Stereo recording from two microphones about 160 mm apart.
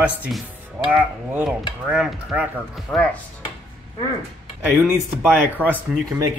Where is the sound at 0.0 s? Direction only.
10° right (ahead or behind).